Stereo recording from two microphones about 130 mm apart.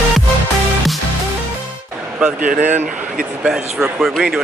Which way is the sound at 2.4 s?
90° right.